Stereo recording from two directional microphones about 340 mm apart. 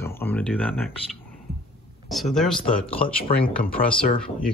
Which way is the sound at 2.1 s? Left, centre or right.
Centre.